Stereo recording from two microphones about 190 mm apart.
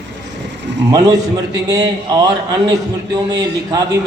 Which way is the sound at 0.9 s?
20° right (ahead or behind).